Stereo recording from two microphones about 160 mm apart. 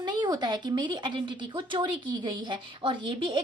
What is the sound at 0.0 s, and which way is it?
A woman's voice, 25° right (ahead or behind).